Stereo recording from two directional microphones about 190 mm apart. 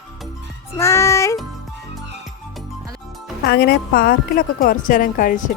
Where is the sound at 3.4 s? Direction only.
55° left (ahead or behind).